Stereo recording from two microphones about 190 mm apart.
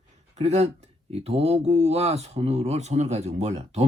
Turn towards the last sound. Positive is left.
turn(degrees=-35)  # may be behind; listen again after turning